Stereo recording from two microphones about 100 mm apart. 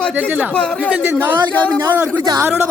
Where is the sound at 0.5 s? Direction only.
10° left (ahead or behind).